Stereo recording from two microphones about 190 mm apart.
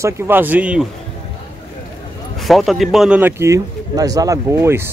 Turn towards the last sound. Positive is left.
turn(degrees=-15)  # may be behind; listen again after turning